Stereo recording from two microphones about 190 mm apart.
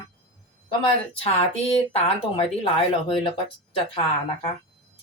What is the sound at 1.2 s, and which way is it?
A woman's voice, 30° left (ahead or behind).